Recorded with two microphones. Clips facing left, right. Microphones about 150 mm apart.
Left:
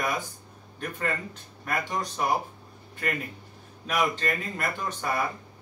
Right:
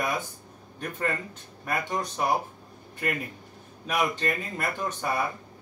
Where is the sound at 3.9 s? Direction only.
15° right (ahead or behind).